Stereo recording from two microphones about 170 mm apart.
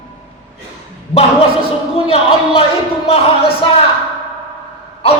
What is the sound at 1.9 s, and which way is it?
Speech, 35° left (ahead or behind).